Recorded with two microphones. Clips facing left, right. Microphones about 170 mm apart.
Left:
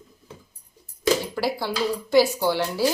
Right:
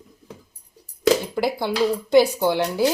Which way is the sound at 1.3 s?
20° right (ahead or behind).